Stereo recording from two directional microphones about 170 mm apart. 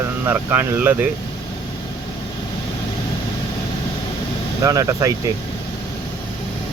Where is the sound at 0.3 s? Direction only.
10° right (ahead or behind).